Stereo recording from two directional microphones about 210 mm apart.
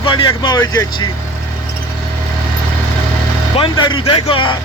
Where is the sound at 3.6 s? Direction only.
20° left (ahead or behind).